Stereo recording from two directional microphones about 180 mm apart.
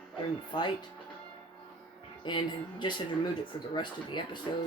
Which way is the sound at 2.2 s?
25° left (ahead or behind).